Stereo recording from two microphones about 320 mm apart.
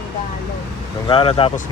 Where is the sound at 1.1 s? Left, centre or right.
Centre.